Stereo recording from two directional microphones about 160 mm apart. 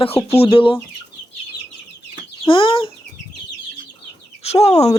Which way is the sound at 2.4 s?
35° left (ahead or behind).